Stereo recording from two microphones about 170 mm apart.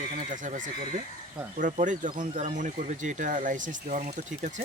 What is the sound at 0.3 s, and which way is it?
Speech, 50° right (ahead or behind).